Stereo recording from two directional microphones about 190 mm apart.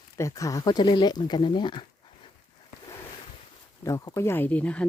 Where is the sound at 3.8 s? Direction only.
15° left (ahead or behind).